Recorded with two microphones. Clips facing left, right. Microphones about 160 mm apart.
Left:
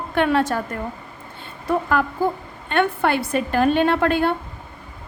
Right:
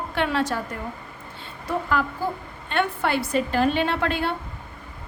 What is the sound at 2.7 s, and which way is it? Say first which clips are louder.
A woman's voice: left 4 dB; 55° left (ahead or behind).